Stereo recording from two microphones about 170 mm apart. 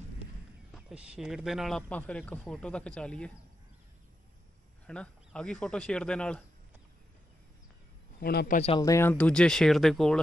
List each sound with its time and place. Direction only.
0.7 s speech: 5° right (ahead or behind)
4.8 s speech: 5° left (ahead or behind)
8.2 s a man's voice: 65° left (ahead or behind)
8.7 s speech: 20° left (ahead or behind); by 10.2 s centre (ahead or behind)